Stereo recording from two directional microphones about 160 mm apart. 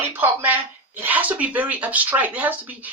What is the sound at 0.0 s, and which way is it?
Speech, 10° right (ahead or behind).